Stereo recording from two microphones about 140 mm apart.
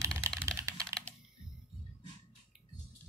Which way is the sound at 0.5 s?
20° right (ahead or behind).